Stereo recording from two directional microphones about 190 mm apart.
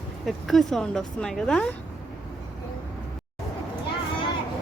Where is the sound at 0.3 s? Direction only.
Centre (ahead or behind).